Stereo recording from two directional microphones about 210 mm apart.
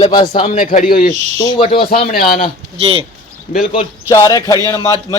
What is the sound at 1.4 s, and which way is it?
Speech, 25° left (ahead or behind).